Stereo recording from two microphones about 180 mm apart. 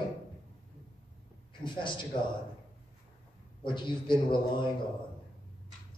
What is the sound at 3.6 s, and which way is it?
A man's voice, 25° left (ahead or behind).